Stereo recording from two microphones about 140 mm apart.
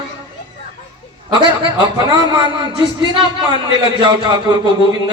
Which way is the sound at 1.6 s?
35° right (ahead or behind).